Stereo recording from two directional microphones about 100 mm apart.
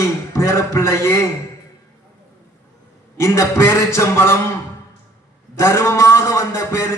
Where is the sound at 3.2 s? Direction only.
30° left (ahead or behind).